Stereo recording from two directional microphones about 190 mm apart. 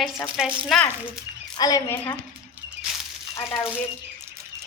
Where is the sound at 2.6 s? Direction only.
10° right (ahead or behind).